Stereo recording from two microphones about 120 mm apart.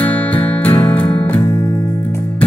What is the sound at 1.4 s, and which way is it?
Music, 25° left (ahead or behind).